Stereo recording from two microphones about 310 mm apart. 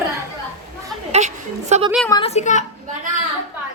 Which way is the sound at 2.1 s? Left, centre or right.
Centre.